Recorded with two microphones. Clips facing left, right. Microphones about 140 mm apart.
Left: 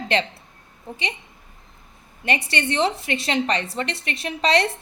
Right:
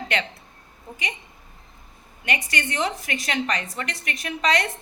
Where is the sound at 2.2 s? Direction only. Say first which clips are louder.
Left 4 dB; 30° left (ahead or behind).